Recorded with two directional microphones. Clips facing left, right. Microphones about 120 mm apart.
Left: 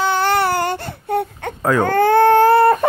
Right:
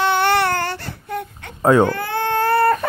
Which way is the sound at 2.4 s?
25° left (ahead or behind).